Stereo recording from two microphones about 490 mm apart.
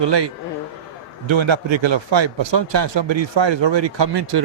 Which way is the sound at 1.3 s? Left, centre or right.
Right.